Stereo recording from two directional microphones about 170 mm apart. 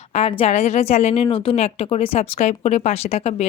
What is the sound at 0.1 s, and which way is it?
A woman's voice, 35° left (ahead or behind).